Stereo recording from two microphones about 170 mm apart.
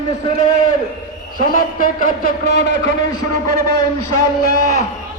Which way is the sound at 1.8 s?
55° left (ahead or behind).